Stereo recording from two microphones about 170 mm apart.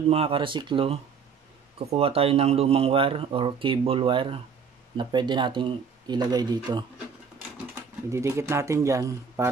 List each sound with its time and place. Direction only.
0.1 s speech: 35° right (ahead or behind)
8.1 s speech: 15° right (ahead or behind)